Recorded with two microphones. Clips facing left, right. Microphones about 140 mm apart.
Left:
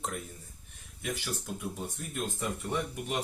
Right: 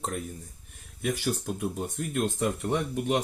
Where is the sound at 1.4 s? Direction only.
65° right (ahead or behind).